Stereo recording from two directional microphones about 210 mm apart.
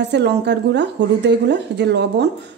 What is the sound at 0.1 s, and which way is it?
A woman's voice, 55° right (ahead or behind).